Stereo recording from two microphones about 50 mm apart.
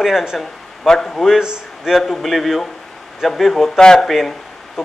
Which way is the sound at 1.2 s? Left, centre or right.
Centre.